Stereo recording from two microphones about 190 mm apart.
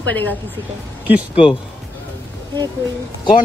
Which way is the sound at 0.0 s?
10° left (ahead or behind).